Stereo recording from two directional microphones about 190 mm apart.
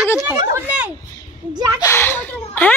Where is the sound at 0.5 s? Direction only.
5° right (ahead or behind).